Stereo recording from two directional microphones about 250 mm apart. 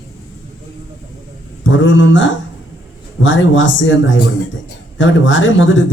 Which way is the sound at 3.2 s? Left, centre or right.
Left.